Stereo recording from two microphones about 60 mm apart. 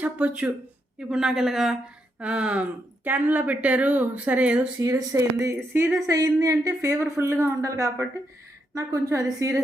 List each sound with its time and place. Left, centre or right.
0.0 s speech: centre
0.9 s speech: centre
2.1 s speech: centre
4.8 s a woman's voice: right